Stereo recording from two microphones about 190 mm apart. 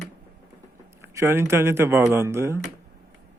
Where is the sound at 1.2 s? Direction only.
15° right (ahead or behind).